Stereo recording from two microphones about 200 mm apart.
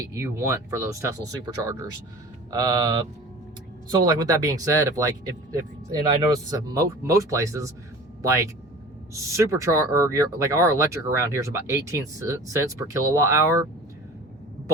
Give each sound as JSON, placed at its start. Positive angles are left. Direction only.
{"t": 0.1, "sound": "speech", "side_deg": -15}
{"t": 2.5, "sound": "speech", "side_deg": -20}